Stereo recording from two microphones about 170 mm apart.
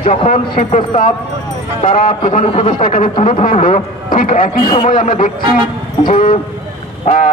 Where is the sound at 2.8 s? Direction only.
45° left (ahead or behind).